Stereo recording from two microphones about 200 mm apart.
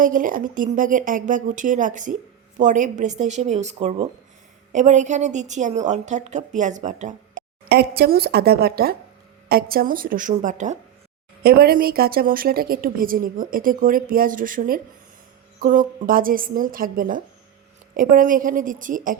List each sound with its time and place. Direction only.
0.0 s a woman's voice: 40° right (ahead or behind)
7.7 s a woman's voice: 55° right (ahead or behind); by 10.8 s 35° right (ahead or behind)
11.4 s a woman's voice: 50° right (ahead or behind)